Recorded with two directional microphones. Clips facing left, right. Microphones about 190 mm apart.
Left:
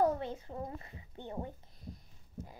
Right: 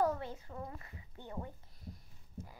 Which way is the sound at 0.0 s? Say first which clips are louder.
Left 3 dB; 20° left (ahead or behind).